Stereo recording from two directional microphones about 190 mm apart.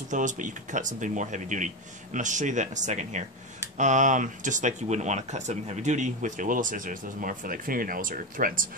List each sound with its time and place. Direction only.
0.1 s speech: 40° right (ahead or behind)